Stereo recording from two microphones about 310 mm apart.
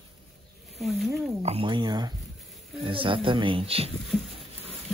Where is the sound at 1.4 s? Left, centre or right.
Centre.